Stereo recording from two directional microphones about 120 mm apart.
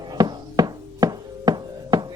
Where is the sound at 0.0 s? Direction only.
35° right (ahead or behind).